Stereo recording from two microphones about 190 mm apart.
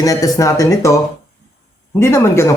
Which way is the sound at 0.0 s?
20° left (ahead or behind).